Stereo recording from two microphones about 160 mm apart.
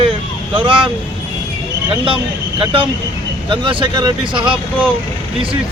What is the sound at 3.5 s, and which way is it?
Speech, 30° right (ahead or behind).